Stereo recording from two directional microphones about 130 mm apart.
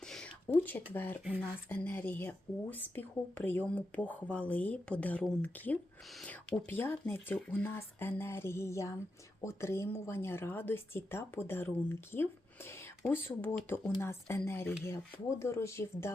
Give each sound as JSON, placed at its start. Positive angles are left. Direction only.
{"t": 0.0, "sound": "speech", "side_deg": 5}